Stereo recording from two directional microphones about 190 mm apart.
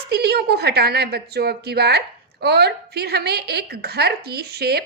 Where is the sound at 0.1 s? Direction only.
60° right (ahead or behind).